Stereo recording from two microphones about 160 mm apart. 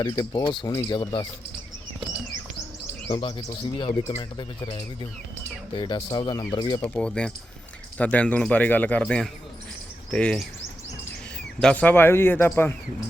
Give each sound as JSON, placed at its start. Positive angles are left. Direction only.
{"t": 0.0, "sound": "speech", "side_deg": 25}
{"t": 3.1, "sound": "speech", "side_deg": 30}
{"t": 6.8, "sound": "speech", "side_deg": 5}
{"t": 11.6, "sound": "speech", "side_deg": 10}